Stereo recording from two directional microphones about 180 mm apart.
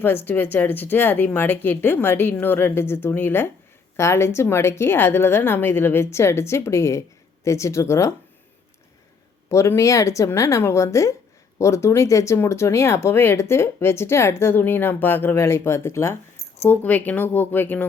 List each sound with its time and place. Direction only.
0.0 s speech: 10° left (ahead or behind)
9.5 s speech: 15° left (ahead or behind)